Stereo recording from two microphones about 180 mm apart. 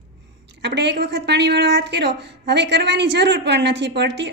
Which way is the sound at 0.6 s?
75° right (ahead or behind).